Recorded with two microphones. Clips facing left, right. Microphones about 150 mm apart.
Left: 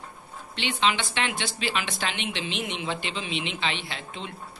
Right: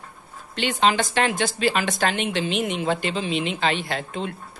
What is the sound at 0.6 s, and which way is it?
A man's voice, 45° right (ahead or behind).